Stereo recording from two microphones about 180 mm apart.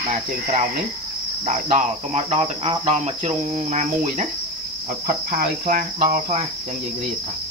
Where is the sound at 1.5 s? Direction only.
45° right (ahead or behind).